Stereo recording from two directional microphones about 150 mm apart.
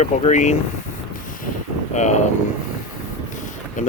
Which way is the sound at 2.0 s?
50° left (ahead or behind).